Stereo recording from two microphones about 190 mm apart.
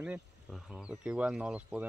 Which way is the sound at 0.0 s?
5° right (ahead or behind).